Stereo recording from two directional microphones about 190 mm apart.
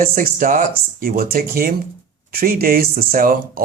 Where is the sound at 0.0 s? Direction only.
50° right (ahead or behind).